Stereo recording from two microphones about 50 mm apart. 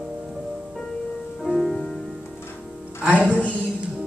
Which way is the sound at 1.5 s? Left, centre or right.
Centre.